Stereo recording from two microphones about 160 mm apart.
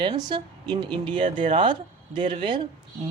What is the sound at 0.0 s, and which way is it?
Speech, 30° right (ahead or behind).